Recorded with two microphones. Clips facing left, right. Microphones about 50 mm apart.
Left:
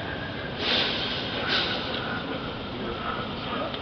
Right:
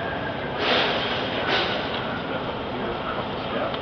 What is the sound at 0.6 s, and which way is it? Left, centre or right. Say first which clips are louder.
Snort: right 5 dB; right.